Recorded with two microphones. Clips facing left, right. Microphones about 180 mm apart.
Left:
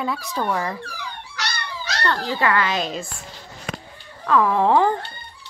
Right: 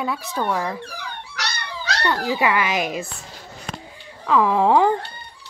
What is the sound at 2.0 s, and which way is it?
A woman's voice, 10° right (ahead or behind).